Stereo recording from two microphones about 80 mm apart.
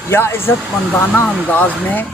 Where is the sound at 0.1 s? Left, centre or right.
Left.